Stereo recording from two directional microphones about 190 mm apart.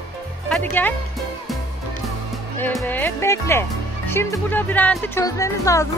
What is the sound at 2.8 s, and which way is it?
Speech, 10° left (ahead or behind).